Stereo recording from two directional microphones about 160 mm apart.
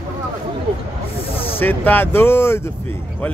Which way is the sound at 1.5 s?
10° left (ahead or behind).